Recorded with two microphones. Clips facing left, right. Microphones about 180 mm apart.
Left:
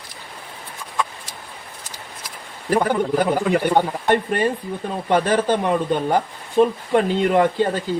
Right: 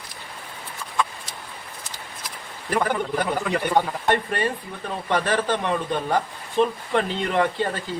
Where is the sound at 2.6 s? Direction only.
30° left (ahead or behind).